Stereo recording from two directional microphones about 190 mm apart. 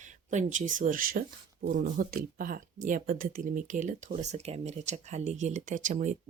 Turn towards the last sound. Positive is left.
turn(degrees=-40)  # may be behind; listen again after turning